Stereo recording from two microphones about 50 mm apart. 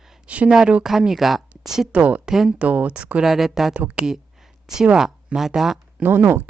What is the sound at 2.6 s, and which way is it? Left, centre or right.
Speech, right.